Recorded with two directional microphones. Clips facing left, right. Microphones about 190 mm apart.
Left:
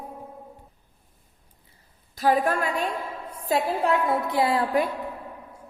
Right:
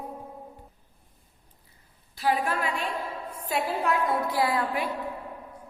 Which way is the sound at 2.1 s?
45° left (ahead or behind).